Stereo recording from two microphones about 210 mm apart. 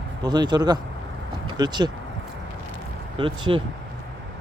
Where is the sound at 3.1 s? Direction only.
25° right (ahead or behind).